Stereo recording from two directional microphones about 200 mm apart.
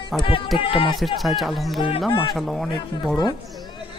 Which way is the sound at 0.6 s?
25° left (ahead or behind).